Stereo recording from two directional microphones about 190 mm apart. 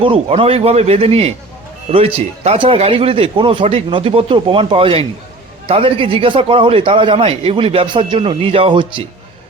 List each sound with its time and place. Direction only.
0.0 s speech: 30° right (ahead or behind)